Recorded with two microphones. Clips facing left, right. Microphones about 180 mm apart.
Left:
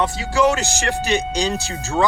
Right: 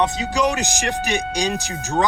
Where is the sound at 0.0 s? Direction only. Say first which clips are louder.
Left 2 dB; 20° right (ahead or behind).